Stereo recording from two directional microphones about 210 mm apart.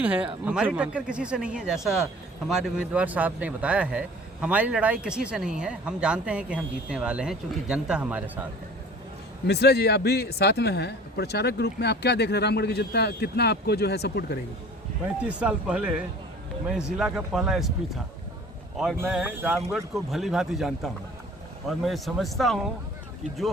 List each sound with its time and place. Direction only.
0.0 s speech: 5° right (ahead or behind)
9.5 s speech: 50° left (ahead or behind)
15.2 s speech: 5° right (ahead or behind)